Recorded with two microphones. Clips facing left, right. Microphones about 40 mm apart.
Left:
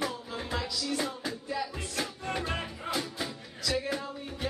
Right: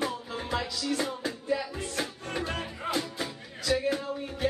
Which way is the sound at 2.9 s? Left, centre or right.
Centre.